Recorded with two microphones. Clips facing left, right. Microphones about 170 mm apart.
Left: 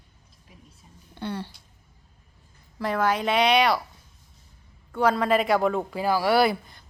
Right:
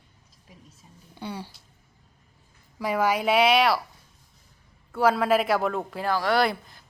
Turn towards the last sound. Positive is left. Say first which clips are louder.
# left 3 dB
turn(degrees=0)  # may be behind; listen again after turning